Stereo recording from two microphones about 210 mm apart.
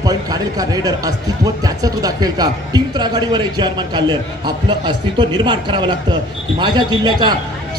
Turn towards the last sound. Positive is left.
turn(degrees=-20)  # may be behind; listen again after turning